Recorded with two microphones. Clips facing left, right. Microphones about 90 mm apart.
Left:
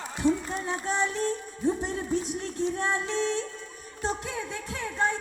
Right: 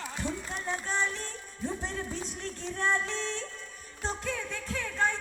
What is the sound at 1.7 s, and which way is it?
Music, 15° left (ahead or behind).